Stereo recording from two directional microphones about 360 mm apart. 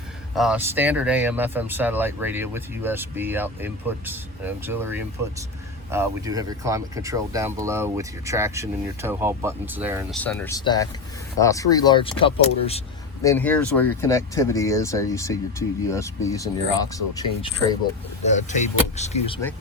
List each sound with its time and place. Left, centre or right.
0.3 s speech: centre
10.2 s speech: centre
13.2 s speech: centre